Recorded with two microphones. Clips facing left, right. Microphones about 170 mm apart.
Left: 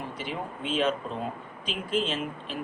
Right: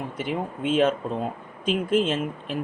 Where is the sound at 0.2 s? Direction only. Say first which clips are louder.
Right 9 dB; 50° right (ahead or behind).